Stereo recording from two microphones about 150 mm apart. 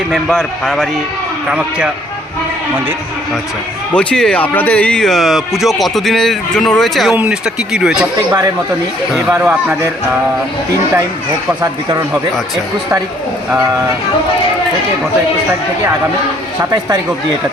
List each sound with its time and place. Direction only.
0.1 s speech: 5° left (ahead or behind)
3.9 s speech: 5° left (ahead or behind)
9.1 s speech: 15° right (ahead or behind)
11.6 s speech: 25° right (ahead or behind)